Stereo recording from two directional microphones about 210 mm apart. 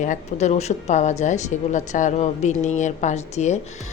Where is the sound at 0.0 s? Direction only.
35° left (ahead or behind).